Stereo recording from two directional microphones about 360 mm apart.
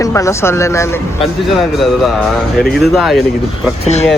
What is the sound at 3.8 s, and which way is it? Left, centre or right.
Speech, centre.